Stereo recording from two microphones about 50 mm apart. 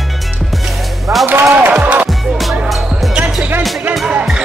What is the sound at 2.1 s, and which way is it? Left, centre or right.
Music, centre.